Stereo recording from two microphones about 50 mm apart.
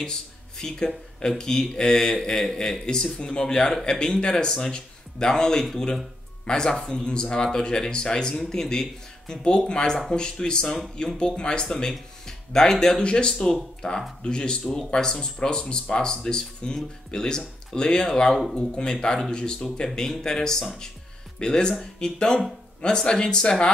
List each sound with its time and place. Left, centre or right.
0.6 s a man's voice: centre
13.0 s a man's voice: centre